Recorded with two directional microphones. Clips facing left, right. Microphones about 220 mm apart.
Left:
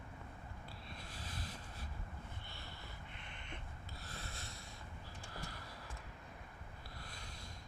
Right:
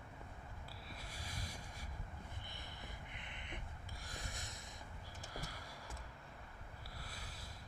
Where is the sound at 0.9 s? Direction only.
10° right (ahead or behind).